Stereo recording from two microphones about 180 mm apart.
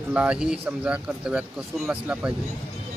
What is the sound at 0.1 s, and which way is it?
Speech, 5° right (ahead or behind).